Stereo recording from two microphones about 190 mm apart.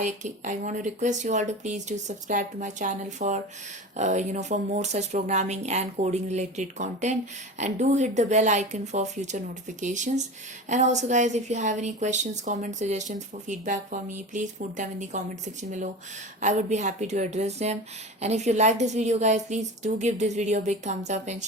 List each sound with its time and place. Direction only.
0.0 s a woman's voice: 40° right (ahead or behind)
16.4 s a woman's voice: 40° right (ahead or behind)